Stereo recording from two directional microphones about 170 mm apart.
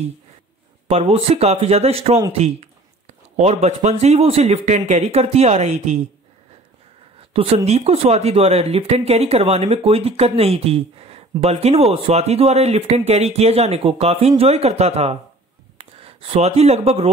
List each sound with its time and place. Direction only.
0.8 s speech: 35° right (ahead or behind)
7.2 s speech: 35° right (ahead or behind)